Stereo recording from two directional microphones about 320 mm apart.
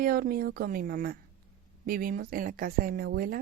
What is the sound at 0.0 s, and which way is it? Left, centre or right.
Speech, right.